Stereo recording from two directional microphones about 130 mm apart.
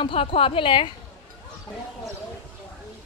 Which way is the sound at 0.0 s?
45° left (ahead or behind).